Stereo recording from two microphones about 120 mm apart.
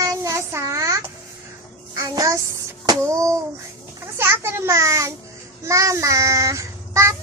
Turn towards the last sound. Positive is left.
turn(degrees=-25)  # may be behind; listen again after turning